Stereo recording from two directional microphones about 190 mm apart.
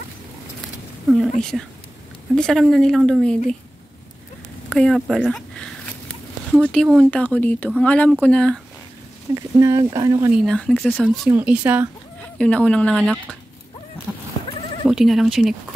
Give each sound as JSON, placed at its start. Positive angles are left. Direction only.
{"t": 1.0, "sound": "speech", "side_deg": 0}
{"t": 4.6, "sound": "walk", "side_deg": 0}
{"t": 6.7, "sound": "speech", "side_deg": 5}
{"t": 9.3, "sound": "speech", "side_deg": -15}
{"t": 10.3, "sound": "speech", "side_deg": 5}
{"t": 11.2, "sound": "speech", "side_deg": -5}
{"t": 12.2, "sound": "speech", "side_deg": 5}
{"t": 14.9, "sound": "speech", "side_deg": 0}